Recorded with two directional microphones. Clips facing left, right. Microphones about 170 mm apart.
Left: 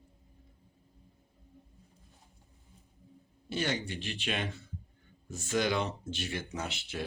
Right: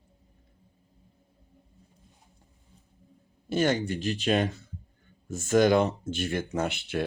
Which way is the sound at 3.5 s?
45° right (ahead or behind).